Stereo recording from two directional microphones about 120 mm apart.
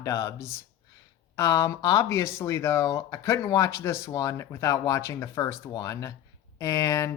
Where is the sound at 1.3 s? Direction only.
25° left (ahead or behind).